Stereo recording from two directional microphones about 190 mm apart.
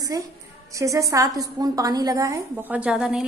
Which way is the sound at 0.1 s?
15° right (ahead or behind).